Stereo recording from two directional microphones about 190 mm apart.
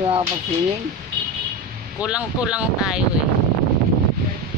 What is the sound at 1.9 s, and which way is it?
Speech, 5° right (ahead or behind).